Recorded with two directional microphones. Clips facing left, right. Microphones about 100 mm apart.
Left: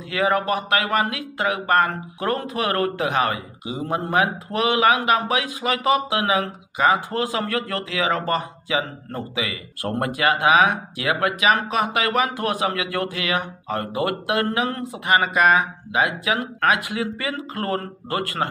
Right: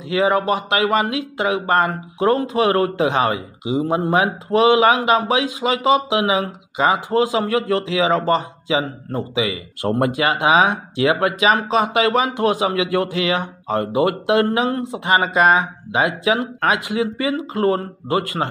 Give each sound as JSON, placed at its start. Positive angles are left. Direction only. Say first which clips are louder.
{"t": 0.1, "sound": "a man's voice", "louder": "right 4 dB", "side_deg": -20}